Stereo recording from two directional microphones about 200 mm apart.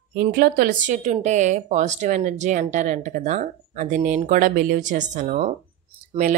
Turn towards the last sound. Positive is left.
turn(degrees=-40)  # may be behind; listen again after turning